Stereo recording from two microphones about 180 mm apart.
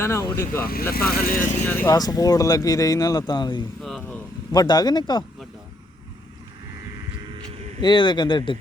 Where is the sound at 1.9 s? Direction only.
20° left (ahead or behind).